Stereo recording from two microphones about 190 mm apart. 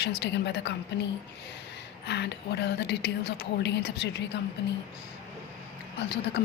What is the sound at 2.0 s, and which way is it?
A woman's voice, 60° left (ahead or behind).